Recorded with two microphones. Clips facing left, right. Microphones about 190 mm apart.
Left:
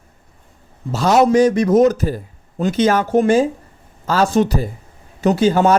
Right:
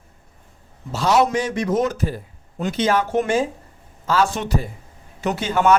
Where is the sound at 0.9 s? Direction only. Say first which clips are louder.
Left 6 dB; 45° left (ahead or behind).